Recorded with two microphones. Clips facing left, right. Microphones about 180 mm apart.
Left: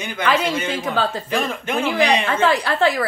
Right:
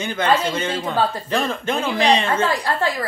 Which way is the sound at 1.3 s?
10° left (ahead or behind).